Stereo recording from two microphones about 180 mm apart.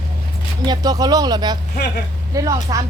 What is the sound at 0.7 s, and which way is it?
Speech, 20° right (ahead or behind).